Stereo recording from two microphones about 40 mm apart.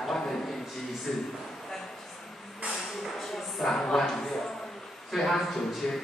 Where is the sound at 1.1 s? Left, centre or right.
Centre.